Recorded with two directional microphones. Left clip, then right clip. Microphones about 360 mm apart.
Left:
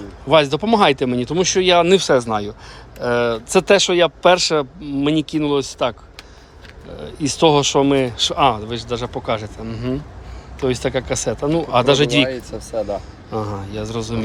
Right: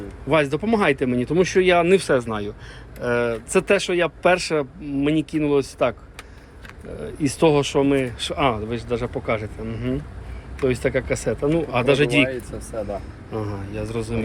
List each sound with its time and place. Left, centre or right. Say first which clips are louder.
0.3 s speech: left 5 dB; centre
7.0 s speech: left 3 dB; centre
12.3 s speech: left 5 dB; left
13.3 s speech: left 4 dB; centre